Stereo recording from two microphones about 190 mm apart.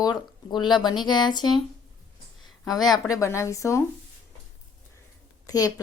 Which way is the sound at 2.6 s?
20° left (ahead or behind).